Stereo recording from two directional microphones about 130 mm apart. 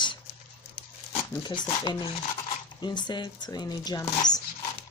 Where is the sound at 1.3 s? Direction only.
30° left (ahead or behind).